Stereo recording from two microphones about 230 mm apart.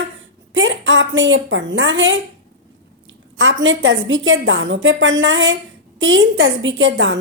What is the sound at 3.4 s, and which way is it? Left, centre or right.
A woman's voice, right.